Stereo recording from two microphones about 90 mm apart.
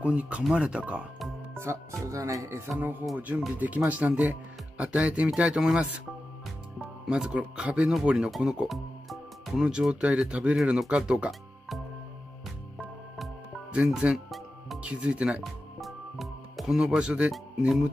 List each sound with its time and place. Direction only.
0.0 s speech: 15° right (ahead or behind)
1.6 s speech: 30° right (ahead or behind)
2.8 s speech: 20° right (ahead or behind)
7.1 s speech: 10° right (ahead or behind)
13.7 s music: 10° right (ahead or behind)
14.8 s speech: 15° right (ahead or behind)
15.4 s music: centre (ahead or behind)
17.3 s speech: 5° right (ahead or behind)